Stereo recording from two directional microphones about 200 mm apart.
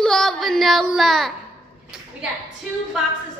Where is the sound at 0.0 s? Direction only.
Centre (ahead or behind).